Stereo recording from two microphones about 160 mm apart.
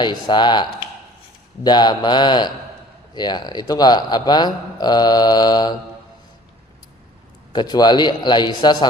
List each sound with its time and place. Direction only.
0.0 s a man's voice: 30° left (ahead or behind)
7.5 s a man's voice: 25° left (ahead or behind)